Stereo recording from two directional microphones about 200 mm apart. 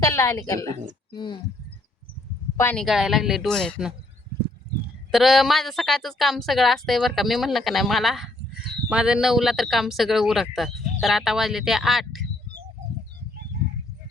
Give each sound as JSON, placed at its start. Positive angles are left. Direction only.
{"t": 0.0, "sound": "a woman's voice", "side_deg": 15}
{"t": 2.6, "sound": "a woman's voice", "side_deg": 10}
{"t": 2.8, "sound": "a man's voice", "side_deg": 0}
{"t": 5.1, "sound": "a man's voice", "side_deg": 0}